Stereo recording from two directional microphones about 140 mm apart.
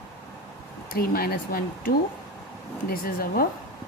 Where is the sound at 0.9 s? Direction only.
90° left.